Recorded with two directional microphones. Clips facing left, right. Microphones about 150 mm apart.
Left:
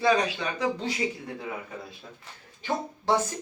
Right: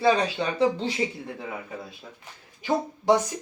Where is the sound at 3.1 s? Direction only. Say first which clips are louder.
Right 4 dB; 15° right (ahead or behind).